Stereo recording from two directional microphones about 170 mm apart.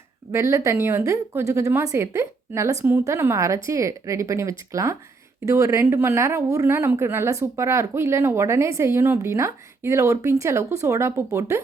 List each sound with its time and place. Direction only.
0.3 s a woman's voice: 15° right (ahead or behind)